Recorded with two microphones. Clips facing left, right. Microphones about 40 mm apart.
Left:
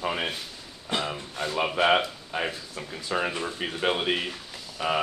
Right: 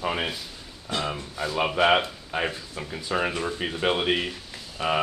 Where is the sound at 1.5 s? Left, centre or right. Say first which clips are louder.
Right 1 dB; centre.